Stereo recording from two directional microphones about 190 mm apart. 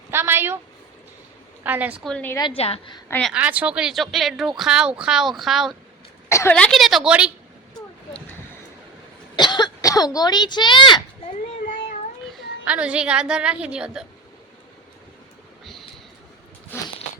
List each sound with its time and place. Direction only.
0.1 s speech: 10° right (ahead or behind)
1.6 s speech: 10° right (ahead or behind)
2.0 s a woman's voice: 5° left (ahead or behind)
2.6 s a woman's voice: 30° left (ahead or behind)
3.1 s speech: 5° left (ahead or behind)
3.3 s speech: 10° right (ahead or behind)
6.2 s speech: 15° left (ahead or behind); by 7.3 s 5° right (ahead or behind)
9.3 s speech: 25° left (ahead or behind)
12.6 s speech: 5° right (ahead or behind)
16.7 s a sound: 10° left (ahead or behind)